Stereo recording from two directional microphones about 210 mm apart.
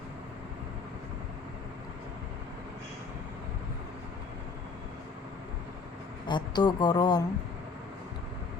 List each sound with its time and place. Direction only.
6.2 s a woman's voice: 20° left (ahead or behind)